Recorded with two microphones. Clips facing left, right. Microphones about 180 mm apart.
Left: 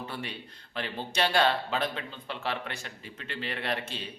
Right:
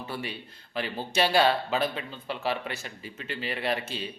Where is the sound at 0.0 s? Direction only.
5° right (ahead or behind).